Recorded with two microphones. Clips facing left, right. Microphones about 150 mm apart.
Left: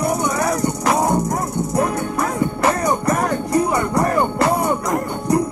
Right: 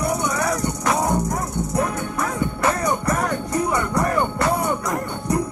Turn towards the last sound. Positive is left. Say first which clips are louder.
# left 4 dB
turn(degrees=35)  # may be behind; listen again after turning